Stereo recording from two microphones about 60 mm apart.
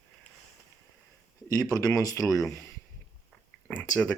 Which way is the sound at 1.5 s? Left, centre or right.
Left.